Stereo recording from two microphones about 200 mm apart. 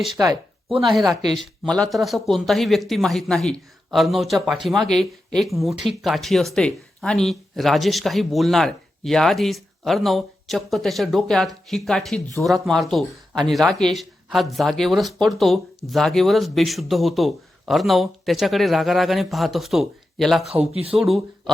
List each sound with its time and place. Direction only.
0.2 s speech: 15° right (ahead or behind)
0.8 s speech: centre (ahead or behind)
20.7 s speech: 30° right (ahead or behind)
21.0 s speech: centre (ahead or behind)